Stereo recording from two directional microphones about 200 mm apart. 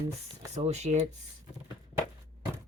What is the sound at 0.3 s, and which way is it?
Speech, 35° right (ahead or behind).